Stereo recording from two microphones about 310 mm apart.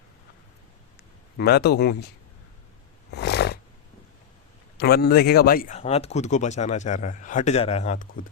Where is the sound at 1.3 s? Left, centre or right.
Left.